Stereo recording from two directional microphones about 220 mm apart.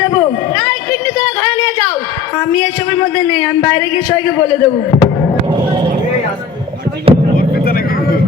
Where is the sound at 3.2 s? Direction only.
15° left (ahead or behind).